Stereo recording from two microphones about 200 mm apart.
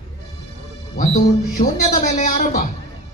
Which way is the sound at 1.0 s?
45° left (ahead or behind).